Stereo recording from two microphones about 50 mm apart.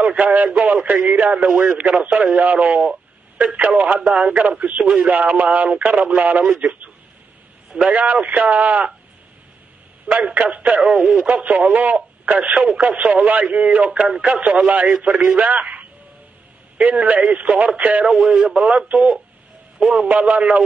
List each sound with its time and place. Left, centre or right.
0.0 s speech: right
4.8 s speech: centre
5.1 s speech: right
10.0 s speech: right
10.8 s speech: centre
14.0 s speech: centre
14.3 s speech: right
14.9 s speech: centre
15.3 s speech: right
20.1 s speech: right